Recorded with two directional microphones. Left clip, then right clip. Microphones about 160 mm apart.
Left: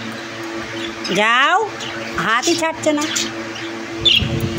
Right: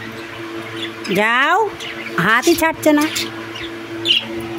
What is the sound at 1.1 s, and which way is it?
Speech, 30° right (ahead or behind).